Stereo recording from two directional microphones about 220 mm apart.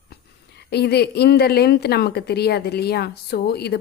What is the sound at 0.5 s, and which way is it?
A woman's voice, 50° left (ahead or behind).